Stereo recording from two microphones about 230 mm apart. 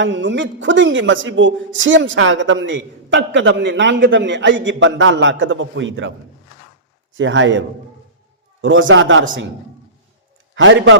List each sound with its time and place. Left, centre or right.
0.0 s a man's voice: right
8.6 s a man's voice: right
10.5 s a man's voice: right